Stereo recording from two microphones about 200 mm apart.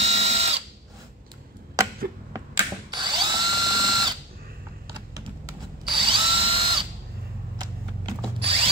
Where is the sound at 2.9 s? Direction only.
20° right (ahead or behind).